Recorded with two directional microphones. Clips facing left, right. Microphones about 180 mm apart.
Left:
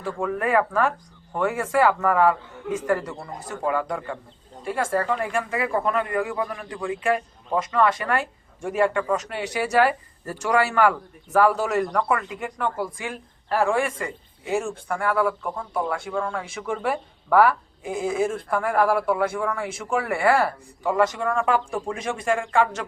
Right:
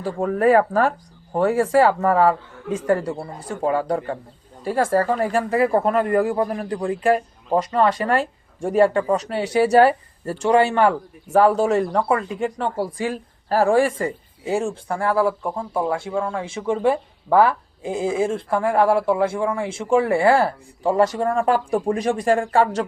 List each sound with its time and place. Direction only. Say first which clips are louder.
0.0 s speech: right 7 dB; 35° right (ahead or behind)